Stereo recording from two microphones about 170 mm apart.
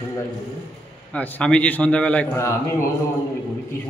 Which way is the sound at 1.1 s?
10° left (ahead or behind).